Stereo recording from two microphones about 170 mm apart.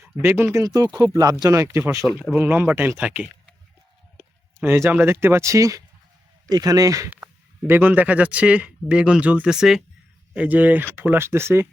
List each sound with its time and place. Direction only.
0.0 s speech: 15° right (ahead or behind)
2.0 s speech: centre (ahead or behind)
2.3 s speech: 10° right (ahead or behind)
4.6 s speech: 15° right (ahead or behind)